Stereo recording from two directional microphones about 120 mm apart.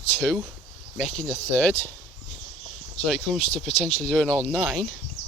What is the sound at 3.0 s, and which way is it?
Speech, 5° left (ahead or behind).